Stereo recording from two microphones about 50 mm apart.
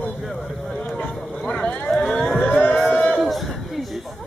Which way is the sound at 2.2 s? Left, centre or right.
Left.